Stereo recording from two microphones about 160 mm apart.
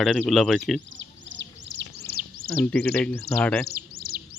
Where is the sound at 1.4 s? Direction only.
90° right.